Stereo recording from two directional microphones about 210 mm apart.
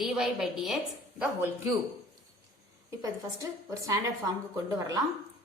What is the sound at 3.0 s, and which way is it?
A woman's voice, 15° right (ahead or behind).